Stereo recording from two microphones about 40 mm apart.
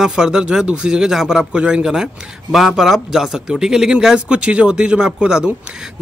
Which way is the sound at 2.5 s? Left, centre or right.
Centre.